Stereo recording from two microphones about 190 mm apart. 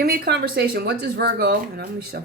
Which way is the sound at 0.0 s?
55° right (ahead or behind).